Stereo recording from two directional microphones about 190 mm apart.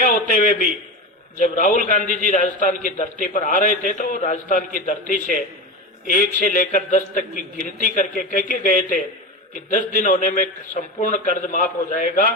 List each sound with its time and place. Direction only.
0.0 s a man's voice: 45° left (ahead or behind)